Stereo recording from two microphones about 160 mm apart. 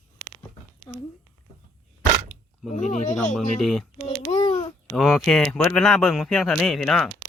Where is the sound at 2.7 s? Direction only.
50° left (ahead or behind).